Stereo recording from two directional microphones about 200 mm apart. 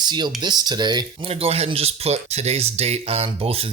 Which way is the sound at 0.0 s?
20° right (ahead or behind).